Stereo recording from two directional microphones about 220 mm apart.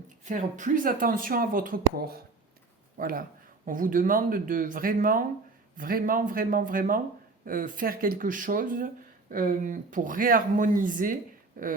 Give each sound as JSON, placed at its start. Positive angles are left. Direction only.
{"t": 0.3, "sound": "speech", "side_deg": -35}